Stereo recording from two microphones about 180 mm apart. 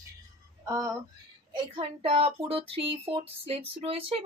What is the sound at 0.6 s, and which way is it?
Speech, 15° right (ahead or behind).